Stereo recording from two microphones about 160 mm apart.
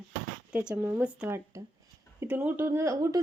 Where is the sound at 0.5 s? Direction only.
10° right (ahead or behind).